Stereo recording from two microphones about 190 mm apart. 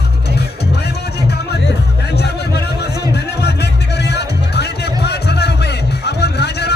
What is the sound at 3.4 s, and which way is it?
Music, 60° left (ahead or behind).